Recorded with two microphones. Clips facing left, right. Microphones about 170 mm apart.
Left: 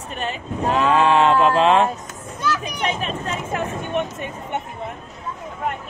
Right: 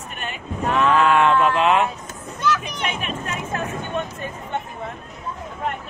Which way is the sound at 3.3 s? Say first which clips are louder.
Left 2 dB; 20° left (ahead or behind).